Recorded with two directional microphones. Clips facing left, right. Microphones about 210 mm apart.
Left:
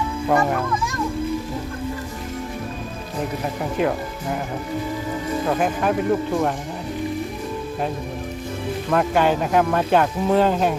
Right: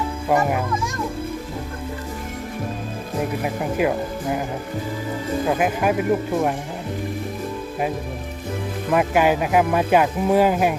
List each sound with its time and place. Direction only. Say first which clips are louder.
0.3 s speech: even; 10° right (ahead or behind)
3.4 s speech: even; 5° right (ahead or behind)
5.5 s speech: right 1 dB; 5° right (ahead or behind)
8.9 s speech: right 1 dB; 10° right (ahead or behind)